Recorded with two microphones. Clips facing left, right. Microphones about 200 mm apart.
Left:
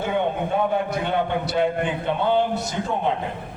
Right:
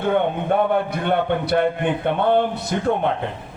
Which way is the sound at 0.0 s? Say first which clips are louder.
Right 3 dB; 60° right (ahead or behind).